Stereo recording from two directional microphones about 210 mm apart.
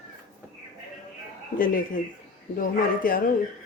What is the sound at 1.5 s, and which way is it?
Speech, 40° left (ahead or behind).